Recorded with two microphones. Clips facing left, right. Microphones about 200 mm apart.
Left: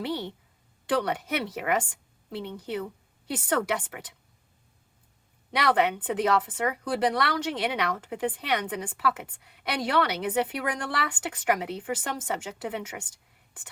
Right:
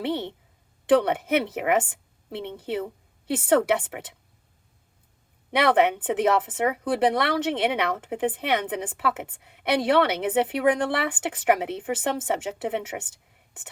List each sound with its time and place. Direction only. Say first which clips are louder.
0.0 s a woman's voice: right 4 dB; 25° right (ahead or behind)
5.5 s speech: right 4 dB; 25° right (ahead or behind)